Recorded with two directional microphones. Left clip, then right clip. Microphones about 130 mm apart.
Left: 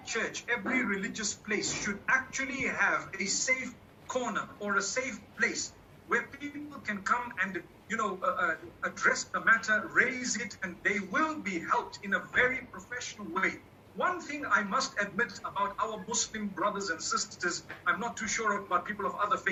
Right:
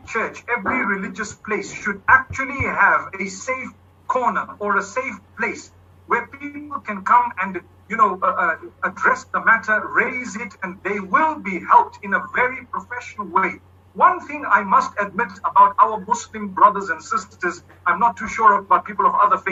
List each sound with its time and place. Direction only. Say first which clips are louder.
0.1 s speech: right 10 dB; 35° right (ahead or behind)